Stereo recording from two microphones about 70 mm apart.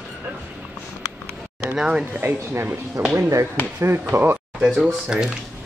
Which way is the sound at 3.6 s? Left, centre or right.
Left.